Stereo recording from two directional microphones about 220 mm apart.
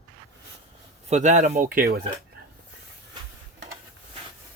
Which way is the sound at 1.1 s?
35° right (ahead or behind).